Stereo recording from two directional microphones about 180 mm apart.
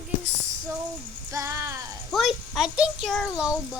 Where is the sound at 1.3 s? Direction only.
15° right (ahead or behind).